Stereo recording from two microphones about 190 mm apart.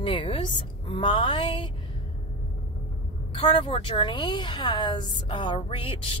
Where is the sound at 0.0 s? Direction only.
25° left (ahead or behind).